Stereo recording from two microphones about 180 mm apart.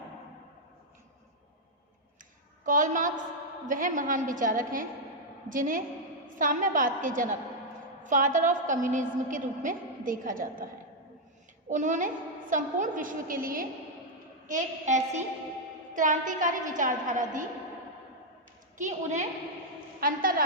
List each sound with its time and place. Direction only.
2.6 s a woman's voice: 45° right (ahead or behind)
11.7 s a woman's voice: 45° right (ahead or behind)
18.8 s a woman's voice: 40° right (ahead or behind)